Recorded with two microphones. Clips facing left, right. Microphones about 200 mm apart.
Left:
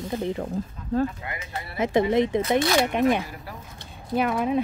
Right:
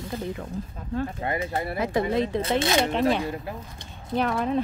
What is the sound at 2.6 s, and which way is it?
Speech, 25° right (ahead or behind).